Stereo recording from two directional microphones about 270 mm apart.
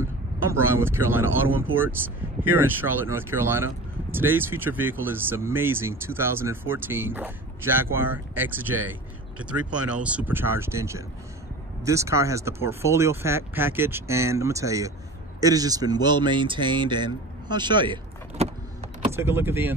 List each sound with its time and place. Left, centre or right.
0.0 s speech: centre